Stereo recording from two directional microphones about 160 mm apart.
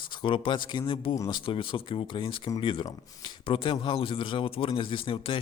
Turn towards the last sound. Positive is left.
turn(degrees=35)  # may be behind; listen again after turning